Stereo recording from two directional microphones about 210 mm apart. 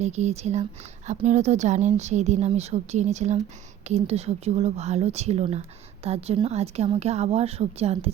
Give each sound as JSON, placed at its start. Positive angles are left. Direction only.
{"t": 0.0, "sound": "a woman's voice", "side_deg": -30}